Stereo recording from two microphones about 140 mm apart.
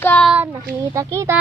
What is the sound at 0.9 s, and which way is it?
Speech, 20° right (ahead or behind).